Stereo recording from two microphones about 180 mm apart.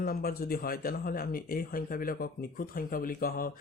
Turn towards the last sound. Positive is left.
turn(degrees=55)  # may be behind; listen again after turning